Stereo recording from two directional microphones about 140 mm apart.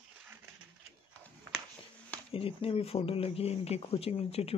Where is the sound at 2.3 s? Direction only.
40° left (ahead or behind).